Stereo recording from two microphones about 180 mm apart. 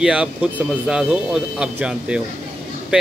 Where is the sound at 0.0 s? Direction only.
5° right (ahead or behind).